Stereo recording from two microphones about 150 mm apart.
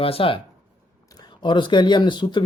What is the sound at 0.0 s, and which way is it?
Speech, 40° left (ahead or behind).